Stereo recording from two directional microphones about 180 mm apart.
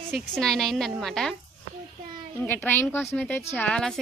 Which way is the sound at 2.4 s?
10° left (ahead or behind).